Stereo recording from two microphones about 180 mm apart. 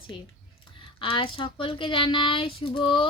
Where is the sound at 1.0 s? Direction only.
30° left (ahead or behind).